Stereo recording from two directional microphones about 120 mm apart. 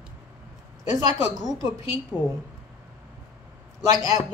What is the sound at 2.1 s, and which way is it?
Speech, 5° left (ahead or behind).